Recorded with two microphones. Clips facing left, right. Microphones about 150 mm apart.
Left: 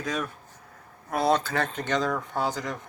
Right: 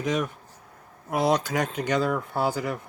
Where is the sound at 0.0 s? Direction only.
20° right (ahead or behind).